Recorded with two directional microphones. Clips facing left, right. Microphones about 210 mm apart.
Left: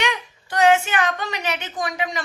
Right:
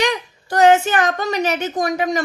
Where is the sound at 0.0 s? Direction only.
40° right (ahead or behind).